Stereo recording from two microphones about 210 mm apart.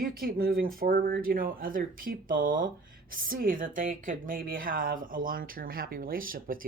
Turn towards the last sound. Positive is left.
turn(degrees=-40)  # may be behind; listen again after turning